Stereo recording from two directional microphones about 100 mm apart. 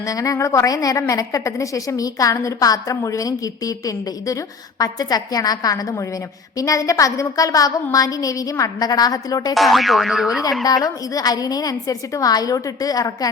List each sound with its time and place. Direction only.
0.0 s a woman's voice: 35° left (ahead or behind)
9.6 s boing: centre (ahead or behind)
10.8 s a woman's voice: 40° left (ahead or behind)